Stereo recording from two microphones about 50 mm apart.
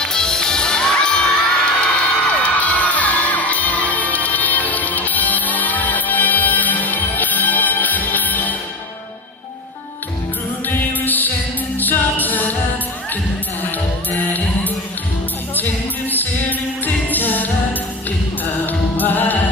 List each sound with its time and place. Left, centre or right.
0.0 s children shouting: centre
1.8 s music: left
10.7 s music: left
14.1 s music: left
18.7 s music: left